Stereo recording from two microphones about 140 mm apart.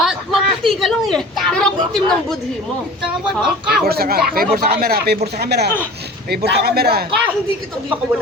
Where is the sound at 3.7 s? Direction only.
90° right.